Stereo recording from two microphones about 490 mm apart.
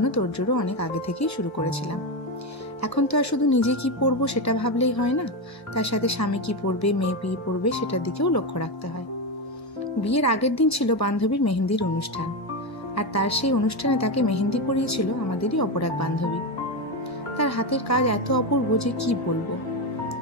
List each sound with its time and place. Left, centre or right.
0.0 s a woman's voice: left
2.9 s a woman's voice: left
10.0 s a woman's voice: left
12.9 s a woman's voice: left
17.4 s a woman's voice: left